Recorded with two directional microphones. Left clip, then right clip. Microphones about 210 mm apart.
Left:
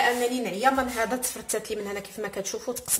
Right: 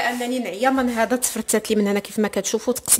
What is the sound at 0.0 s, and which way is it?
A woman's voice, 55° right (ahead or behind).